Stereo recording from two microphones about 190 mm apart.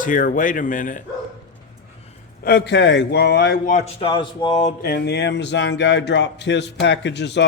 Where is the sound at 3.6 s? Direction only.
35° left (ahead or behind).